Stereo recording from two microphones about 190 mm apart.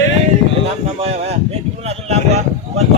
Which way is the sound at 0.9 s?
35° right (ahead or behind).